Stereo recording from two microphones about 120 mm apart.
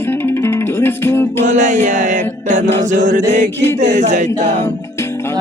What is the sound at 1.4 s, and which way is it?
Music, 90° right.